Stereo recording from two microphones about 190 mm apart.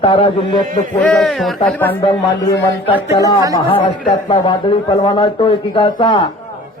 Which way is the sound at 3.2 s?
20° left (ahead or behind).